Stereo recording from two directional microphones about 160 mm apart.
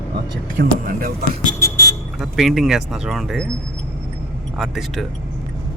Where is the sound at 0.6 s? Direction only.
65° right (ahead or behind).